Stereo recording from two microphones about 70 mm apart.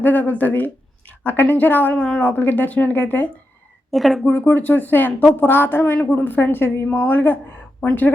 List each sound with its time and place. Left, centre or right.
0.0 s speech: left
3.9 s a woman's voice: centre
4.3 s speech: left